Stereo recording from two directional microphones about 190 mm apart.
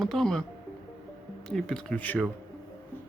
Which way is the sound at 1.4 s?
5° left (ahead or behind).